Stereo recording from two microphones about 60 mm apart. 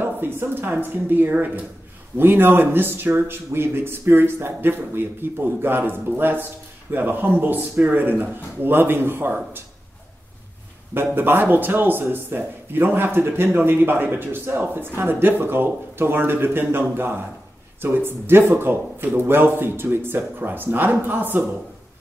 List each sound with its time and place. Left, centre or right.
0.0 s speech: right
11.0 s speech: right